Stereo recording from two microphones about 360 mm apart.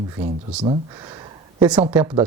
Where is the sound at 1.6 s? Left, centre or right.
Centre.